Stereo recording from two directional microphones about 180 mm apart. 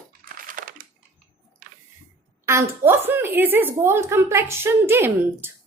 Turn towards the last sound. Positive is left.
turn(degrees=-15)  # may be behind; listen again after turning